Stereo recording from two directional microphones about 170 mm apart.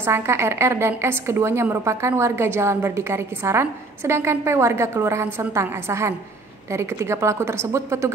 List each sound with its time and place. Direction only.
0.0 s a woman's voice: 15° right (ahead or behind)